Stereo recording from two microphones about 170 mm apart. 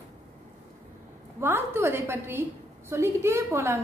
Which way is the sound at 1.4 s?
15° right (ahead or behind).